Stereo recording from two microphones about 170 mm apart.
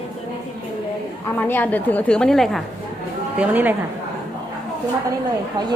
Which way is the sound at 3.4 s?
10° right (ahead or behind).